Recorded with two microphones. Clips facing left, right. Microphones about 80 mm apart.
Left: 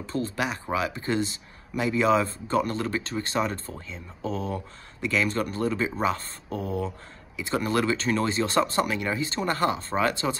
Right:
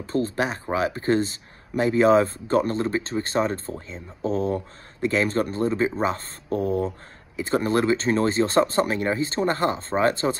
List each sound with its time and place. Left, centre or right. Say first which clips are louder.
0.0 s speech: right 4 dB; right
6.5 s speech: right 6 dB; right